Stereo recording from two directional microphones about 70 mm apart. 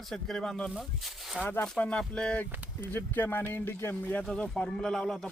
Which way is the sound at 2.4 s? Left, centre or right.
Left.